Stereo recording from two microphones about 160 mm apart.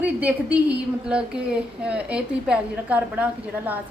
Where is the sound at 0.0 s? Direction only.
10° right (ahead or behind).